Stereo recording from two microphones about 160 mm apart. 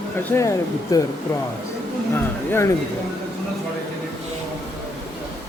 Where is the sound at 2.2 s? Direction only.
15° left (ahead or behind).